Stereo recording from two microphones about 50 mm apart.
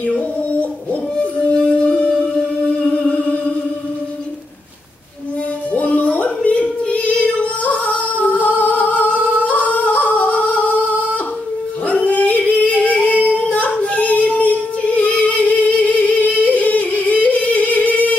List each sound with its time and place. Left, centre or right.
0.0 s music: left
1.1 s music: left
5.7 s music: left
11.9 s dog: left
13.3 s female singing: left